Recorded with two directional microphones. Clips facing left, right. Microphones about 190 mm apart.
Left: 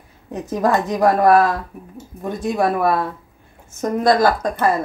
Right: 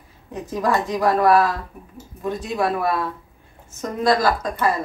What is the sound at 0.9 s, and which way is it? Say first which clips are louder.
Speech: left 3 dB; 45° left (ahead or behind).